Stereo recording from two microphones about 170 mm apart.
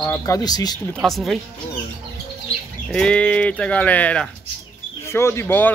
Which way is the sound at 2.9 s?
5° left (ahead or behind).